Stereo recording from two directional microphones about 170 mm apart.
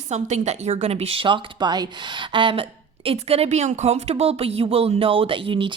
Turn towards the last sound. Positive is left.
turn(degrees=-30)  # may be behind; listen again after turning